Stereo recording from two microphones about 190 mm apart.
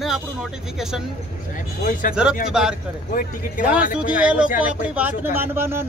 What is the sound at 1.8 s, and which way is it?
Speech, 45° left (ahead or behind).